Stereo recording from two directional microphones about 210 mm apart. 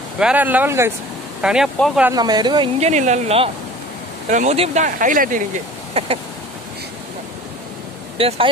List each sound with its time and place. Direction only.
0.2 s speech: 5° right (ahead or behind)
2.0 s speech: 20° right (ahead or behind); by 5.4 s 40° right (ahead or behind)
6.0 s speech: 30° right (ahead or behind)
8.2 s speech: 25° right (ahead or behind)